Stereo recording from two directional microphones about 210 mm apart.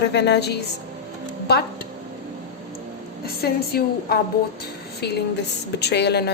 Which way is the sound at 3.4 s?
50° left (ahead or behind).